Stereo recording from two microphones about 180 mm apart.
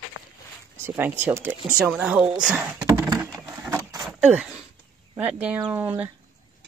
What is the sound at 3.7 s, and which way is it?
Vehicle, 20° right (ahead or behind).